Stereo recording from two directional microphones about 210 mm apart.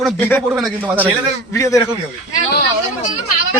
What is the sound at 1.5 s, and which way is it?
Speech, 15° left (ahead or behind).